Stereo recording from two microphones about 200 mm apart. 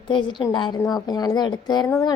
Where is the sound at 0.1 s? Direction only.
25° left (ahead or behind).